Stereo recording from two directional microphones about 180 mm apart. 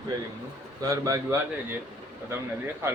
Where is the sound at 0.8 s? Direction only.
20° right (ahead or behind).